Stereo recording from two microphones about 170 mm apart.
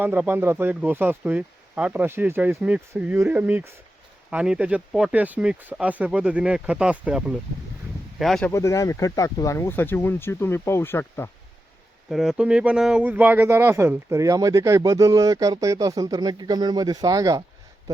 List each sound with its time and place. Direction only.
0.0 s speech: 10° right (ahead or behind)
8.4 s speech: 15° left (ahead or behind)
12.1 s speech: 5° right (ahead or behind); by 17.4 s 20° right (ahead or behind)